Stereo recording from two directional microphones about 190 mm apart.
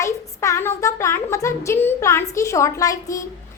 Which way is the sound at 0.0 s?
15° left (ahead or behind).